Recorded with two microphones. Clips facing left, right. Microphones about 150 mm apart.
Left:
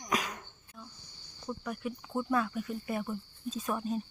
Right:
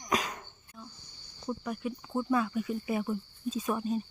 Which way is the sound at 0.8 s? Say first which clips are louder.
Right 2 dB; centre (ahead or behind).